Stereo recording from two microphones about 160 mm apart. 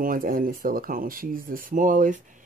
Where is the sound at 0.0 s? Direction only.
60° right (ahead or behind).